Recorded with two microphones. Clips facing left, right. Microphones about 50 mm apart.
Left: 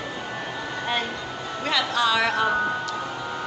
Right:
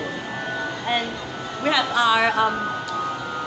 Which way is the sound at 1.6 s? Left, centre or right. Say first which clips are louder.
Right 4 dB; centre.